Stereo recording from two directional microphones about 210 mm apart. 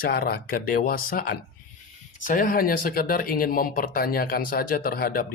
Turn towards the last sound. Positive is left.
turn(degrees=45)  # may be behind; listen again after turning